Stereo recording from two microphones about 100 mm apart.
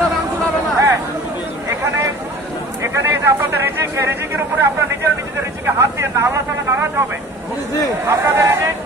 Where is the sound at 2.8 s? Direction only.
25° right (ahead or behind).